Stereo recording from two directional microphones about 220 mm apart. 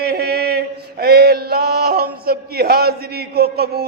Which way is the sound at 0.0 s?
45° right (ahead or behind).